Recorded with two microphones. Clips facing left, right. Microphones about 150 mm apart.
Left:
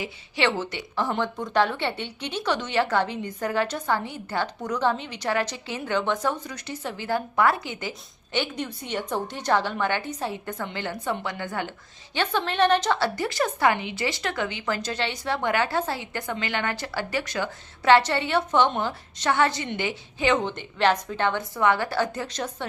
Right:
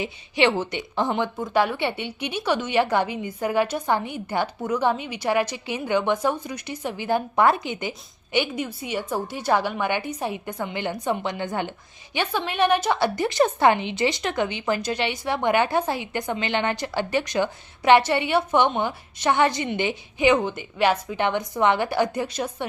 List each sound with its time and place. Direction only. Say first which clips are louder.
0.0 s speech: right 4 dB; 15° right (ahead or behind)
1.1 s speech: right 1 dB; 10° right (ahead or behind)